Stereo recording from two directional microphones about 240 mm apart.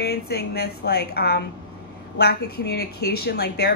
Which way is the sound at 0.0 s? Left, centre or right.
Left.